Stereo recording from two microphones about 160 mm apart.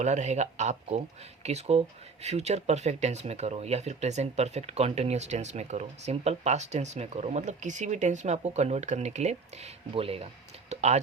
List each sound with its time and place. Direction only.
0.0 s speech: 45° right (ahead or behind)